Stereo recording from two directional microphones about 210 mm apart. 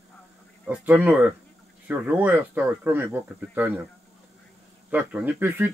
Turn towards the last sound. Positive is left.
turn(degrees=-10)  # may be behind; listen again after turning